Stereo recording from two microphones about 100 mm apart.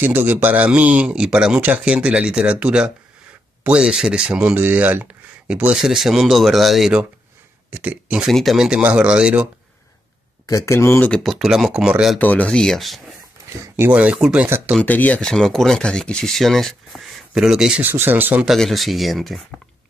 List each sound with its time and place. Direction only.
0.0 s speech: 20° right (ahead or behind); by 7.0 s centre (ahead or behind)
7.7 s speech: 15° right (ahead or behind)
8.3 s speech: centre (ahead or behind)
10.4 s speech: 30° left (ahead or behind)
11.1 s speech: centre (ahead or behind)
12.2 s speech: 15° left (ahead or behind)
13.7 s speech: 15° right (ahead or behind)
14.9 s speech: 15° left (ahead or behind); by 17.8 s 5° right (ahead or behind)
17.8 s speech: 20° right (ahead or behind)
18.4 s speech: centre (ahead or behind)